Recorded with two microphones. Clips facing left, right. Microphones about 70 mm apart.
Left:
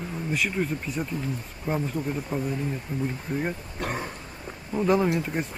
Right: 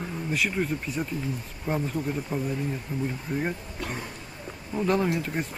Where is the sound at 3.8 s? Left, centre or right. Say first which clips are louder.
Left 4 dB; left.